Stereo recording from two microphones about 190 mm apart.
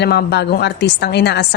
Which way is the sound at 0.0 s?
60° left (ahead or behind).